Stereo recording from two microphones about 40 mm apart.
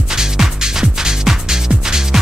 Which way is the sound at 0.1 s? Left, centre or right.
Centre.